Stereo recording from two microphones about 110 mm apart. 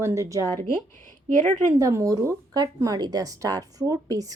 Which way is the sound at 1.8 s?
30° right (ahead or behind).